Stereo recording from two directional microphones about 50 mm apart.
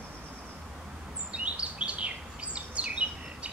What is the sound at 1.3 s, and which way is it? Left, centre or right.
Chirp, right.